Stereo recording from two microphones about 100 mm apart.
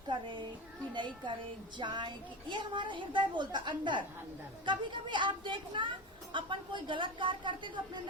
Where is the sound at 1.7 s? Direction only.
50° right (ahead or behind).